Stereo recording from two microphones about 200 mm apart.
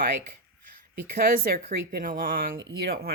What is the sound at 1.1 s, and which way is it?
Speech, 45° right (ahead or behind).